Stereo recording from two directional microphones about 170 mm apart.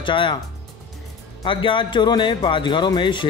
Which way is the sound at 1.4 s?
30° left (ahead or behind).